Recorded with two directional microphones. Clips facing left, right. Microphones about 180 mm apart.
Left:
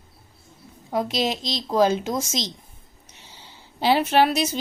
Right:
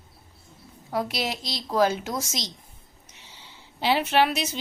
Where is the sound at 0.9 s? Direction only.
20° left (ahead or behind).